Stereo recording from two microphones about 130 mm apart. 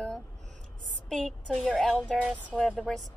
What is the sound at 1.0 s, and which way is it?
A woman's voice, 5° left (ahead or behind).